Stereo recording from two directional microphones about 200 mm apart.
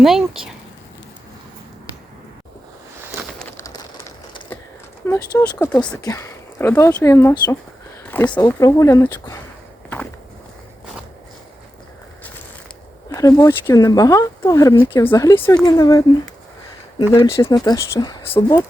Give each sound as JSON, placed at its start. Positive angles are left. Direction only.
{"t": 0.0, "sound": "speech", "side_deg": 0}
{"t": 3.6, "sound": "a sound", "side_deg": 15}
{"t": 5.0, "sound": "speech", "side_deg": 15}
{"t": 8.0, "sound": "a sound", "side_deg": 10}
{"t": 8.4, "sound": "speech", "side_deg": 15}
{"t": 13.1, "sound": "speech", "side_deg": 15}
{"t": 17.2, "sound": "speech", "side_deg": 25}